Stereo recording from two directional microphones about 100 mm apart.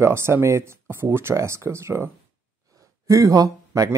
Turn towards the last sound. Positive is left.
turn(degrees=-35)  # may be behind; listen again after turning